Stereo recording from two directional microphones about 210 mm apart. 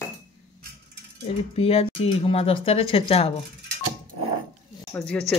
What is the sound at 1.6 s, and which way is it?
Speech, 30° left (ahead or behind).